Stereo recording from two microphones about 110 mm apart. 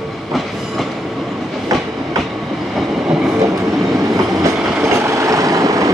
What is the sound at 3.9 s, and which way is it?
Train, 30° right (ahead or behind).